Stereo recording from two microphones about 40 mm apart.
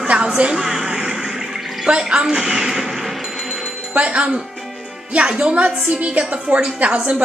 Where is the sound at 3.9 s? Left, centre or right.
Right.